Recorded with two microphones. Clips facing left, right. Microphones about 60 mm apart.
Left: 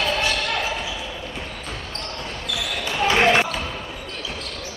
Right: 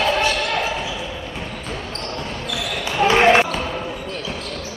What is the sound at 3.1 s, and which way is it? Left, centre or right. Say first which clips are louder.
Basketball bounce: right 3 dB; centre.